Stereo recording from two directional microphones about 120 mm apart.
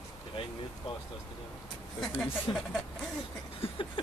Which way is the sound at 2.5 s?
35° left (ahead or behind).